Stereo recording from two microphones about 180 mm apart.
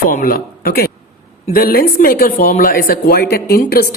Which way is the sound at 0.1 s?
50° left (ahead or behind).